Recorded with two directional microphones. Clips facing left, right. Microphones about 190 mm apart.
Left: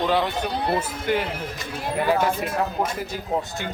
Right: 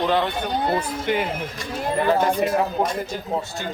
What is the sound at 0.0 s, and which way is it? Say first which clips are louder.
A woman's voice: right 1 dB; 10° left (ahead or behind).